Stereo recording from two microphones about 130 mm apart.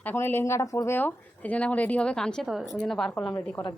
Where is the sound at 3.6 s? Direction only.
40° left (ahead or behind).